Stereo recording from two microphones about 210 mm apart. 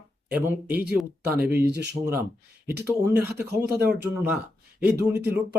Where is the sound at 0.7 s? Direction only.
45° right (ahead or behind).